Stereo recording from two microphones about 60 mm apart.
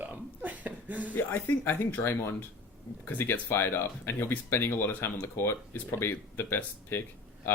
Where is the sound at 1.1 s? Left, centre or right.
Left.